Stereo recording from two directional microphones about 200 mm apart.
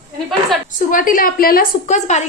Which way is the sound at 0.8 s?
40° left (ahead or behind).